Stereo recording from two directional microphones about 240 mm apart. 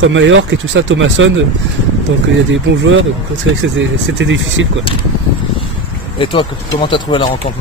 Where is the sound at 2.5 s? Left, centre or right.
Right.